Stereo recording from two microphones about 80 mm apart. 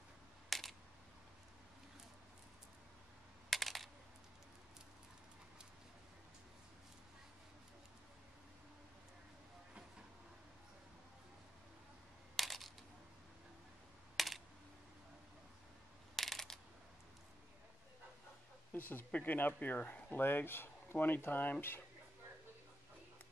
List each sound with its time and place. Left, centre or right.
0.5 s camera: centre
3.4 s computer keyboard: centre
12.4 s a sound: centre
14.1 s computer keyboard: centre
16.2 s a sound: centre
18.7 s speech: left